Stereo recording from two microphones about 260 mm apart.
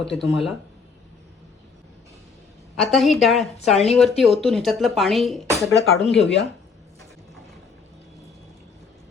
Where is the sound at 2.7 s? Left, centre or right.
Centre.